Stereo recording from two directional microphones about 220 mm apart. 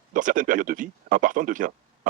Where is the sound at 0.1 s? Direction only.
35° right (ahead or behind).